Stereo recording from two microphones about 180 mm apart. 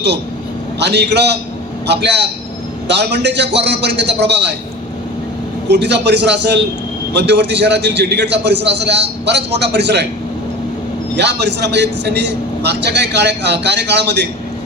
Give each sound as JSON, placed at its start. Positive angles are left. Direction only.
{"t": 0.8, "sound": "a man's voice", "side_deg": -70}
{"t": 5.6, "sound": "a man's voice", "side_deg": -70}
{"t": 11.2, "sound": "a man's voice", "side_deg": -70}